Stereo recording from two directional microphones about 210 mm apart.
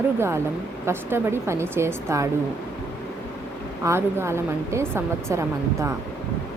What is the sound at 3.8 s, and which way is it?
Speech, 10° right (ahead or behind).